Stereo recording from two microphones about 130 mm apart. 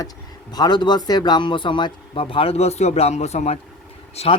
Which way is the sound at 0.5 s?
35° left (ahead or behind).